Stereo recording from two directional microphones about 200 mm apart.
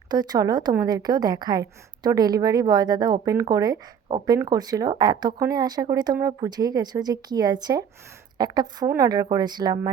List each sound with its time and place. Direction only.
0.1 s speech: 20° right (ahead or behind)